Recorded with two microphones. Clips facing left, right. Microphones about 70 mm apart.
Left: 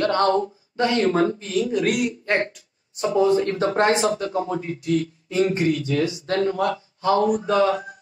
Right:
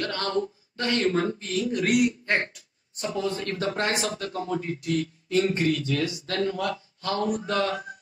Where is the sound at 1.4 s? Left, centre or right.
Centre.